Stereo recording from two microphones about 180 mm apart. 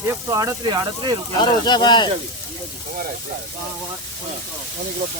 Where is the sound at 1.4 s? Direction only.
25° left (ahead or behind).